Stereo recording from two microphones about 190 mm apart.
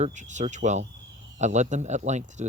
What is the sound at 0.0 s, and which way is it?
Speech, 40° right (ahead or behind).